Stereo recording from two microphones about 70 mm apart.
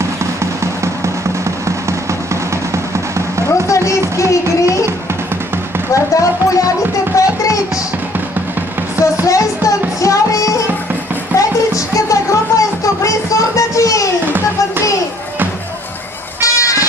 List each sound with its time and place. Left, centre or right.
2.7 s music: right
3.4 s a sound: left
4.2 s music: left
5.9 s a sound: left
9.2 s music: left
16.3 s music: left